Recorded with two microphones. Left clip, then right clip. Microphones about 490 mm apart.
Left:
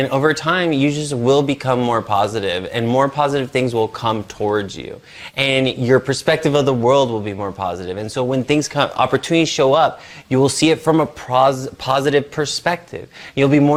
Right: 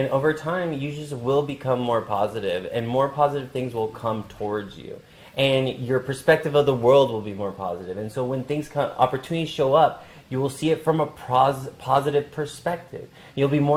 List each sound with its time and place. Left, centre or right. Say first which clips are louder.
0.1 s speech: left 6 dB; left